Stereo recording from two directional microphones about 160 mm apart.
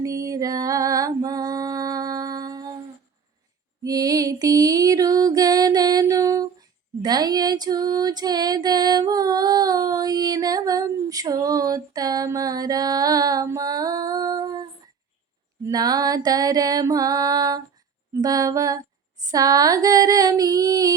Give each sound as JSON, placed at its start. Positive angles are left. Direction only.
{"t": 0.0, "sound": "music", "side_deg": -20}
{"t": 3.8, "sound": "music", "side_deg": -20}